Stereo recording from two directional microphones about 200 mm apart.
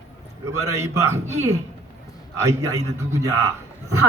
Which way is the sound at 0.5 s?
15° right (ahead or behind).